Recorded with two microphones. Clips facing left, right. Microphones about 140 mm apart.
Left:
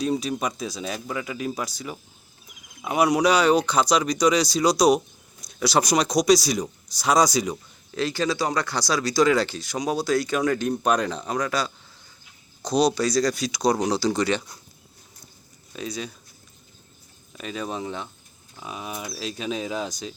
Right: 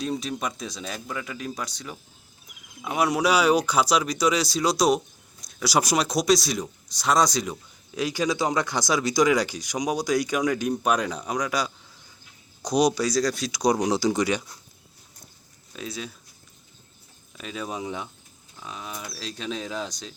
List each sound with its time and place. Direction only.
0.0 s speech: centre (ahead or behind)
5.5 s a sound: centre (ahead or behind)
5.7 s speech: 5° right (ahead or behind)
7.9 s speech: 15° right (ahead or behind)
13.6 s speech: 15° right (ahead or behind)
15.7 s speech: centre (ahead or behind)
17.3 s speech: centre (ahead or behind)
18.5 s speech: 10° left (ahead or behind)